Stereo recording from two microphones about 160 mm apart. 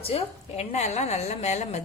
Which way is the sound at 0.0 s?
40° left (ahead or behind).